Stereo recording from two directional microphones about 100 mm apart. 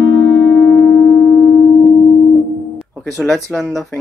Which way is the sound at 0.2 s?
30° left (ahead or behind).